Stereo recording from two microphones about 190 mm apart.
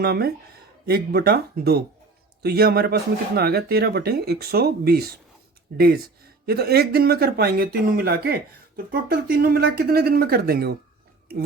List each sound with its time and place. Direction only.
0.0 s speech: 55° right (ahead or behind)